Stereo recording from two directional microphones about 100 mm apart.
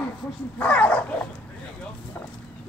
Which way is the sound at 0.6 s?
15° left (ahead or behind).